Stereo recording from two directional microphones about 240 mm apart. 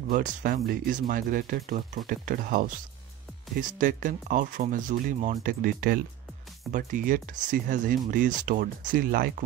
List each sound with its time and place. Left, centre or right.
0.1 s speech: right